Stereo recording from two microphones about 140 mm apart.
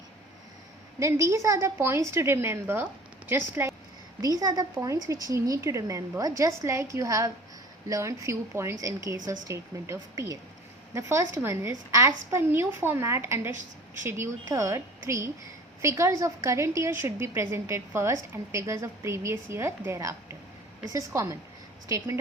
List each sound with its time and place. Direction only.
1.2 s a woman's voice: 20° right (ahead or behind)